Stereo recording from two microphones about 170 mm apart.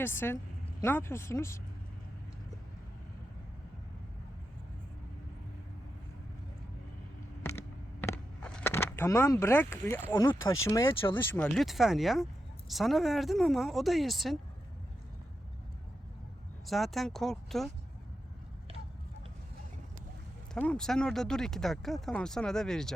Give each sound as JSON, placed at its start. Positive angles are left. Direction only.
{"t": 0.0, "sound": "speech", "side_deg": 15}
{"t": 7.4, "sound": "a sound", "side_deg": 15}
{"t": 10.2, "sound": "speech", "side_deg": 20}
{"t": 16.6, "sound": "speech", "side_deg": 0}
{"t": 20.5, "sound": "speech", "side_deg": 5}